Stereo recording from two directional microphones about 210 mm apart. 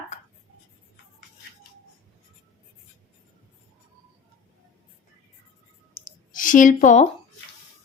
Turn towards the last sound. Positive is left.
turn(degrees=35)  # may be behind; listen again after turning